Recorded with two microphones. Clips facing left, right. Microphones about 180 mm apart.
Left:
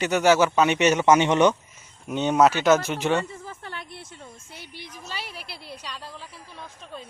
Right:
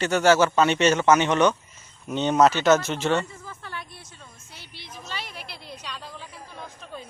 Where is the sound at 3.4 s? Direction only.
25° left (ahead or behind).